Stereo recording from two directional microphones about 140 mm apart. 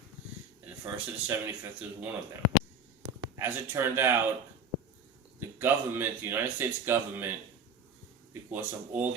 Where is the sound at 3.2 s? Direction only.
20° right (ahead or behind).